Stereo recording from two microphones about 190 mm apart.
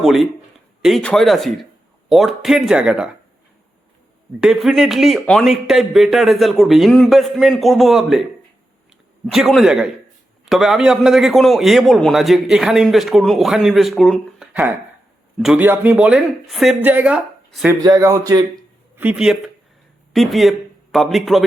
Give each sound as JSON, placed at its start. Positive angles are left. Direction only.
{"t": 0.0, "sound": "a man's voice", "side_deg": 0}
{"t": 4.4, "sound": "a man's voice", "side_deg": 0}
{"t": 9.2, "sound": "a man's voice", "side_deg": 0}
{"t": 17.7, "sound": "speech", "side_deg": -15}
{"t": 18.9, "sound": "a man's voice", "side_deg": -5}